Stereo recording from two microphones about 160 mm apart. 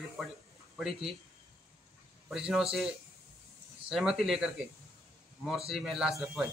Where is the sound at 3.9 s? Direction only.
5° right (ahead or behind).